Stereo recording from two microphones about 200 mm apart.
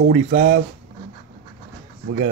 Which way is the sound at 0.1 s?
40° right (ahead or behind).